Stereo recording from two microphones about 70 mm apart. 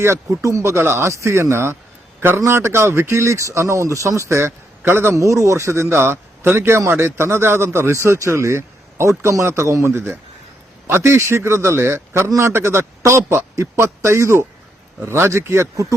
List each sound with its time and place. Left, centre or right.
0.0 s a man's voice: right
5.1 s speech: right